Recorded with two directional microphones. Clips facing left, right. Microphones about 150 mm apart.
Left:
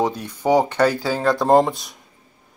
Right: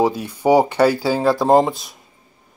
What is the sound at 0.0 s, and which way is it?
Speech, 10° right (ahead or behind).